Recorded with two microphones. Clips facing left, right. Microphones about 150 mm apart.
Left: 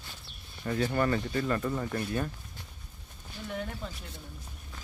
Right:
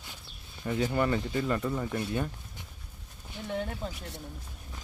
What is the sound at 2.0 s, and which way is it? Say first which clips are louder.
Speech: even; 15° right (ahead or behind).